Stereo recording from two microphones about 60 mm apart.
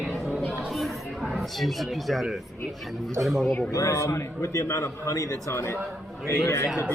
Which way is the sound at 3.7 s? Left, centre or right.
Left.